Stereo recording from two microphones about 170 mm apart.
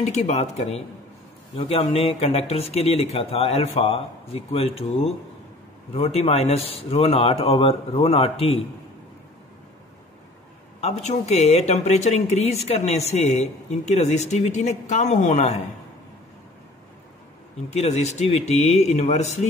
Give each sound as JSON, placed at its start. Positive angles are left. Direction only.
{"t": 0.0, "sound": "speech", "side_deg": 40}
{"t": 10.8, "sound": "speech", "side_deg": 40}
{"t": 17.6, "sound": "speech", "side_deg": 40}